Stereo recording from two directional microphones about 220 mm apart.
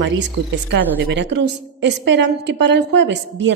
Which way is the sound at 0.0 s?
55° right (ahead or behind).